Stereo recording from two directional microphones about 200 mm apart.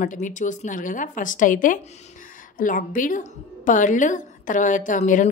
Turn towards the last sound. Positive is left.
turn(degrees=40)  # may be behind; listen again after turning